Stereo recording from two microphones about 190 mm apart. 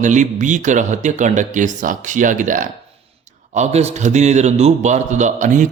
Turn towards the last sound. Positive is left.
turn(degrees=-40)  # may be behind; listen again after turning